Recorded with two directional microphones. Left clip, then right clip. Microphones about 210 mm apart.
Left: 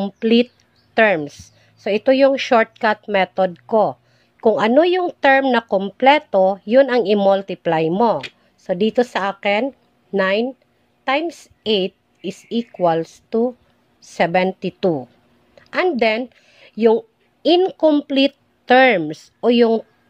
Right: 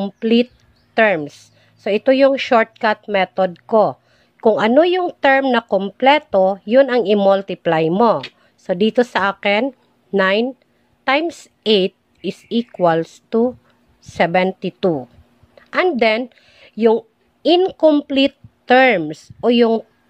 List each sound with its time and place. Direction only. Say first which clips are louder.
0.0 s a woman's voice: even; centre (ahead or behind)